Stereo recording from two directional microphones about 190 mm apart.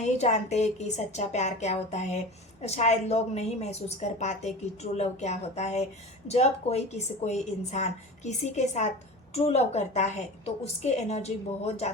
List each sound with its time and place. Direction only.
0.0 s a woman's voice: 35° left (ahead or behind)